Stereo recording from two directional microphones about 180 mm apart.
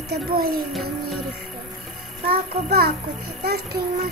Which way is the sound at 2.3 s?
60° right (ahead or behind).